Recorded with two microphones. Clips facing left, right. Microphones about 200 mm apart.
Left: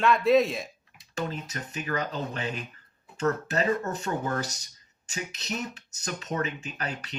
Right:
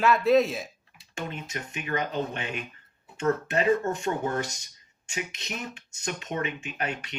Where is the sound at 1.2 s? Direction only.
35° left (ahead or behind).